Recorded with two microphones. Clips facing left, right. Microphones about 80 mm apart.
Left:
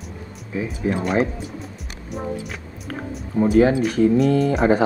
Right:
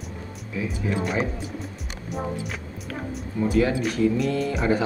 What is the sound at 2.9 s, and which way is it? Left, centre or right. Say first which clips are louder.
Speech: left 2 dB; left.